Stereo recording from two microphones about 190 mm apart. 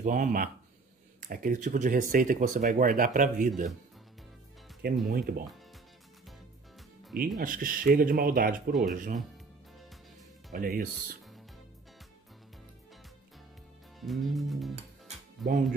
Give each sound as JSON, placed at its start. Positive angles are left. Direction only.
{"t": 0.0, "sound": "speech", "side_deg": -45}
{"t": 5.0, "sound": "speech", "side_deg": -50}
{"t": 7.3, "sound": "speech", "side_deg": -45}
{"t": 10.5, "sound": "speech", "side_deg": -50}
{"t": 13.9, "sound": "music", "side_deg": 0}
{"t": 15.0, "sound": "music", "side_deg": -45}